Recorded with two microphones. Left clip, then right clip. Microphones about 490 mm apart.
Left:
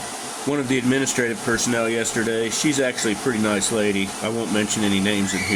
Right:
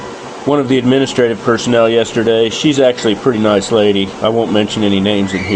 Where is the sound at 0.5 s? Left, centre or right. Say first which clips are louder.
Right 10 dB; left.